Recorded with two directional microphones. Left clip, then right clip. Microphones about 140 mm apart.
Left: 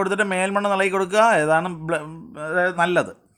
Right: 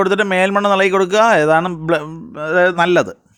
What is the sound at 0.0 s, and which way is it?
Speech, 40° right (ahead or behind).